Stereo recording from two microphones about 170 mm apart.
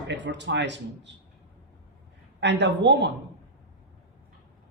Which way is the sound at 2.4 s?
90° right.